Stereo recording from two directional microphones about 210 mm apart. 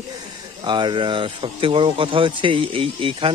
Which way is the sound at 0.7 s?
20° right (ahead or behind).